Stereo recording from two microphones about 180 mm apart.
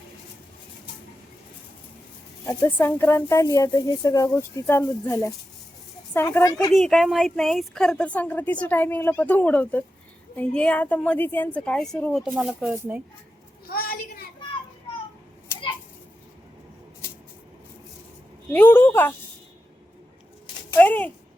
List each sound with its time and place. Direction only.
2.6 s a woman's voice: 10° left (ahead or behind)
4.6 s a woman's voice: 5° left (ahead or behind)
5.0 s a woman's voice: 20° left (ahead or behind)
6.7 s a woman's voice: centre (ahead or behind)
13.7 s a sound: 55° left (ahead or behind)
18.5 s a woman's voice: 10° left (ahead or behind)
20.7 s speech: 10° left (ahead or behind)